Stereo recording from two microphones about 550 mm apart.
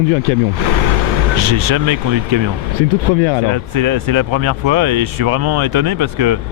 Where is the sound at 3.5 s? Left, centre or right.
Right.